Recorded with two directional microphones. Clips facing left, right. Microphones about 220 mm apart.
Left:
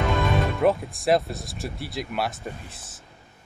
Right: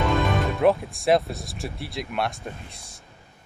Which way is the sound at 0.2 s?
Centre (ahead or behind).